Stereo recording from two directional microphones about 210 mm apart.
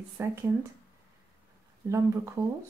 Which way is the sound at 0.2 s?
10° right (ahead or behind).